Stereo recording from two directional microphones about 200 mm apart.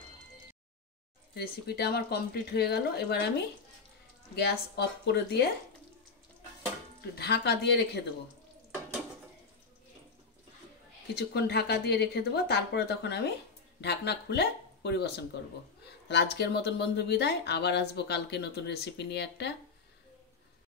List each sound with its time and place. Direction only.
1.3 s speech: 55° left (ahead or behind)
4.4 s speech: 55° left (ahead or behind)
7.2 s speech: 55° left (ahead or behind)
11.1 s speech: 55° left (ahead or behind)